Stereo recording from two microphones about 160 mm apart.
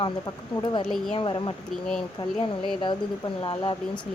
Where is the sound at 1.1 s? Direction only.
30° left (ahead or behind).